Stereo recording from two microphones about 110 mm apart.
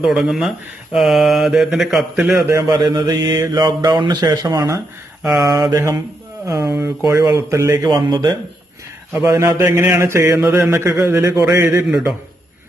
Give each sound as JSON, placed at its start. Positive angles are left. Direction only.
{"t": 0.0, "sound": "speech", "side_deg": -5}
{"t": 2.5, "sound": "mantra", "side_deg": -35}
{"t": 7.3, "sound": "mantra", "side_deg": -25}
{"t": 7.9, "sound": "speech", "side_deg": -45}
{"t": 9.2, "sound": "mantra", "side_deg": -35}